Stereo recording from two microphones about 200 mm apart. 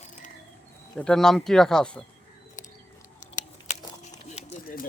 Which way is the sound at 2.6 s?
40° left (ahead or behind).